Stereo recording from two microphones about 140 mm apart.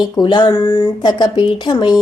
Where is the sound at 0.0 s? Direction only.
30° left (ahead or behind).